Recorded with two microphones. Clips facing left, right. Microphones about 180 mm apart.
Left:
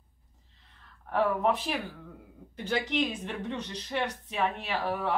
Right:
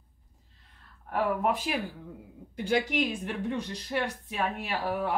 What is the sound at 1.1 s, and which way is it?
A woman's voice, 10° right (ahead or behind).